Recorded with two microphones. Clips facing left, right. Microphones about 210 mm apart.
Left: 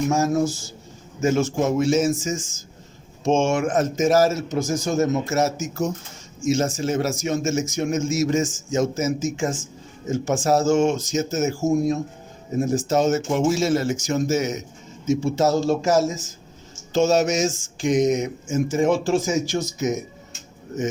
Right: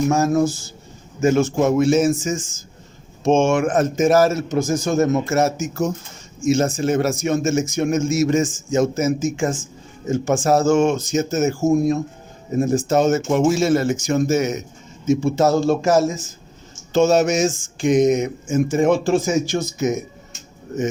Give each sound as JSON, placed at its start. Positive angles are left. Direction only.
{"t": 0.1, "sound": "speech", "side_deg": -55}